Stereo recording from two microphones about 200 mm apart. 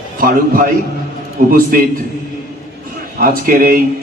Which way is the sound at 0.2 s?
45° right (ahead or behind).